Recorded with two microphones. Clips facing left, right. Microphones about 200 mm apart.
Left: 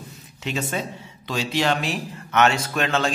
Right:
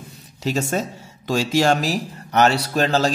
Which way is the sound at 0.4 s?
40° right (ahead or behind).